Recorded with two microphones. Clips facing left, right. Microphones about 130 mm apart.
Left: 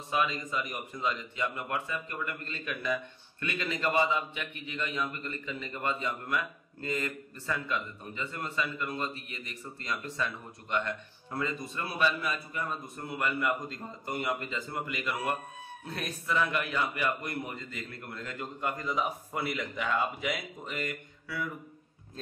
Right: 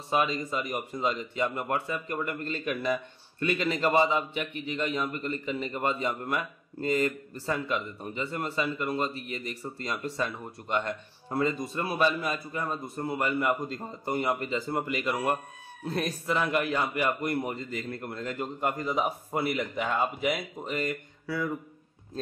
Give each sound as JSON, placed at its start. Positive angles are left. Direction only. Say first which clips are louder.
{"t": 0.1, "sound": "speech", "louder": "right 3 dB", "side_deg": -35}